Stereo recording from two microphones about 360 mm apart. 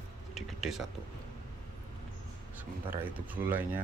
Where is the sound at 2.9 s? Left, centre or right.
Centre.